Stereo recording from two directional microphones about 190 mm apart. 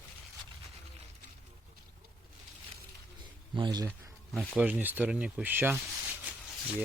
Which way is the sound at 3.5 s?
25° right (ahead or behind).